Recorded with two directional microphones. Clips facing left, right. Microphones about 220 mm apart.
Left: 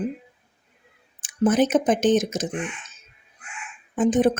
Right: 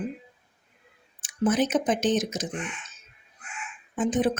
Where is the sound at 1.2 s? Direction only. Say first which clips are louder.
Left 4 dB; 50° left (ahead or behind).